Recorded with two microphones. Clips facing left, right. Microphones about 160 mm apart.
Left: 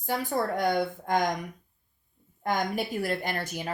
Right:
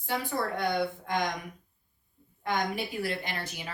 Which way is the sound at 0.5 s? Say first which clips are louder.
Left 3 dB; 45° left (ahead or behind).